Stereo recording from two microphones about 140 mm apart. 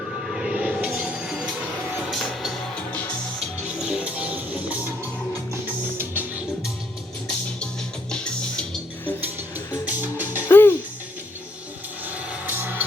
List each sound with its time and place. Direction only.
0.3 s music: 5° right (ahead or behind)
3.8 s music: 5° right (ahead or behind)
6.0 s music: 15° right (ahead or behind)
8.1 s music: 5° left (ahead or behind)
9.8 s music: 10° right (ahead or behind)
10.5 s music: 15° left (ahead or behind)
12.5 s music: 15° right (ahead or behind)